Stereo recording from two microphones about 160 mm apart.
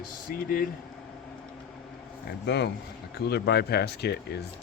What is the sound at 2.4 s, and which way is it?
Speech, 90° left.